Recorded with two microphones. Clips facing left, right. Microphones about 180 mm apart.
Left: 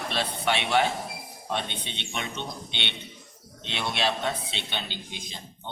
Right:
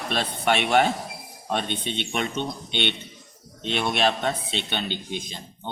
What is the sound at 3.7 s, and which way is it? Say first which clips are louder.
Speech: right 5 dB; 50° right (ahead or behind).